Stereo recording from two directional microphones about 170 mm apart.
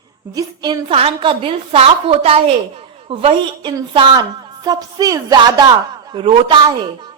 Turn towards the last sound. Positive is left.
turn(degrees=-30)  # may be behind; listen again after turning